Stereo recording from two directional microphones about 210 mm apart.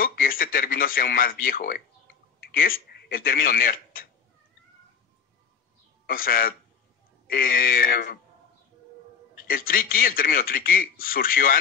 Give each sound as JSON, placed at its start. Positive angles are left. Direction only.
{"t": 0.0, "sound": "speech", "side_deg": 45}
{"t": 6.0, "sound": "a man's voice", "side_deg": 45}
{"t": 9.3, "sound": "a man's voice", "side_deg": 45}